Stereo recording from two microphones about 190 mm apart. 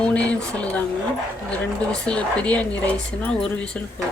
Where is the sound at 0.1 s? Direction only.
5° left (ahead or behind).